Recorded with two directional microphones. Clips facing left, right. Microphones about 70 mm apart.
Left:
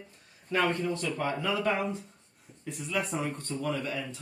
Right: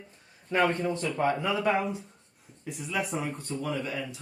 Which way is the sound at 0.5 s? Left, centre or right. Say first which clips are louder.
Right 2 dB; right.